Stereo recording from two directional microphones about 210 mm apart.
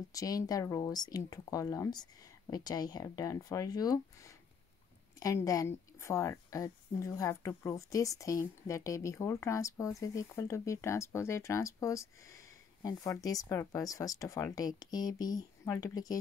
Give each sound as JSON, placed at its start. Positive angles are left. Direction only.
{"t": 0.1, "sound": "a woman's voice", "side_deg": 15}